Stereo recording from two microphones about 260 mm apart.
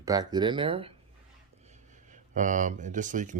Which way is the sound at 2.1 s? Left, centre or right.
Right.